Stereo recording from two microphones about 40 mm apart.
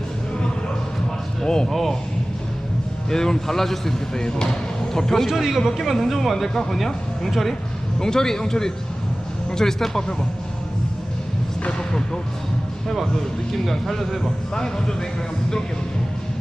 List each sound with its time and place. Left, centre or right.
1.4 s a sound: centre
1.7 s a man's voice: centre
3.1 s speech: centre
5.3 s a man's voice: centre
7.9 s speech: centre
11.8 s speech: centre
12.9 s a man's voice: centre
14.5 s speech: centre